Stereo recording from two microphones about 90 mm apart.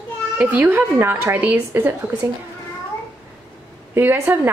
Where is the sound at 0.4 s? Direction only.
15° right (ahead or behind).